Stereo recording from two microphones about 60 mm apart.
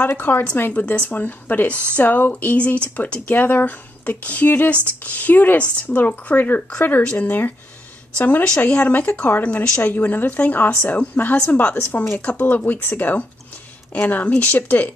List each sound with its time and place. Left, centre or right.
0.0 s a woman's voice: left; by 7.2 s centre
7.2 s a woman's voice: left